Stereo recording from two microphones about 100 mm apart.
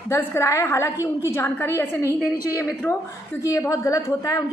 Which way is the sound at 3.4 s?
30° left (ahead or behind).